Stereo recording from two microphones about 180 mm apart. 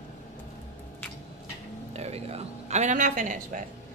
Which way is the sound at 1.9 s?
35° right (ahead or behind).